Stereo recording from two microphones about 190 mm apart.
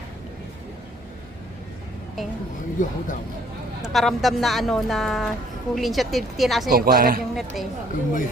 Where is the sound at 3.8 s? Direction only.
Centre (ahead or behind).